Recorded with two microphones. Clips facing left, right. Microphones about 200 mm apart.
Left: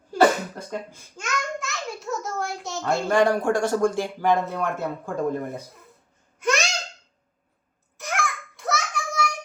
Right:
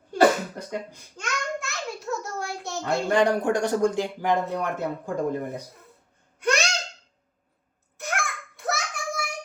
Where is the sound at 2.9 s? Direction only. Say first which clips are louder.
Left 1 dB; 20° right (ahead or behind).